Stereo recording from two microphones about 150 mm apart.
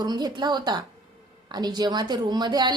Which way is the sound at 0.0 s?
30° right (ahead or behind).